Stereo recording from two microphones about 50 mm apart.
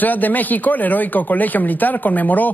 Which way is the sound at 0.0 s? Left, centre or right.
Left.